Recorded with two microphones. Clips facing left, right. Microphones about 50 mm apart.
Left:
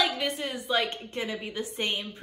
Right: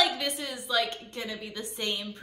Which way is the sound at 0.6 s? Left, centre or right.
Left.